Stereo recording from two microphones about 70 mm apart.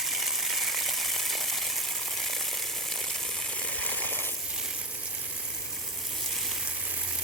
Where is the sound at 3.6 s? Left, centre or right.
Centre.